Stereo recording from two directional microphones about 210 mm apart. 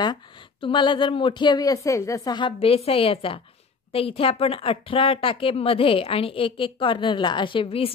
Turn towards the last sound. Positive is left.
turn(degrees=25)  # may be behind; listen again after turning